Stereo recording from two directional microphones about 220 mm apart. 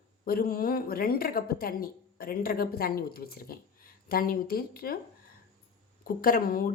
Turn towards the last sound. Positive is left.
turn(degrees=40)  # may be behind; listen again after turning